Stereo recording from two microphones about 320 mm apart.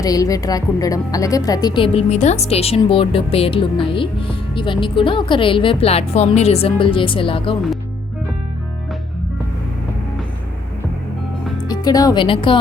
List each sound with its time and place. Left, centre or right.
0.0 s speech: centre
11.7 s speech: centre